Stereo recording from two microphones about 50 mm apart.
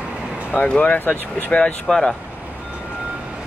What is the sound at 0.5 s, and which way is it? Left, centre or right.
Speech, left.